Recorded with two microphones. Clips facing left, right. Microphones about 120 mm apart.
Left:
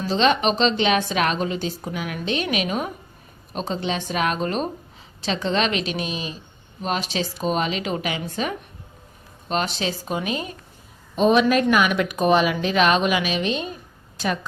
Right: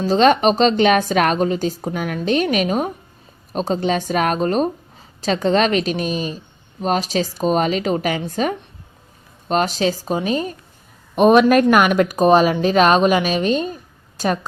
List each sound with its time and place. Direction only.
0.0 s a woman's voice: 45° right (ahead or behind)
11.1 s a woman's voice: 55° right (ahead or behind)